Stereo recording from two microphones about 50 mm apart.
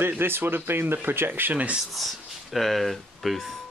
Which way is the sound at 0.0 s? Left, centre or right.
Right.